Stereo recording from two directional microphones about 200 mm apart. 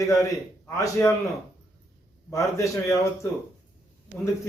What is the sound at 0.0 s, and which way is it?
Speech, 15° left (ahead or behind).